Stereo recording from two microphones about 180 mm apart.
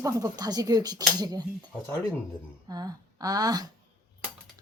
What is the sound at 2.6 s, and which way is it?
Speech, 20° right (ahead or behind).